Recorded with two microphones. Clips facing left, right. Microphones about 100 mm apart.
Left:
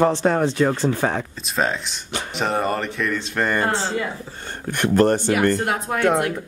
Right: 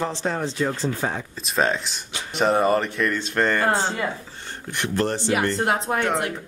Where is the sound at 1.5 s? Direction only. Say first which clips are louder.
Right 1 dB; centre (ahead or behind).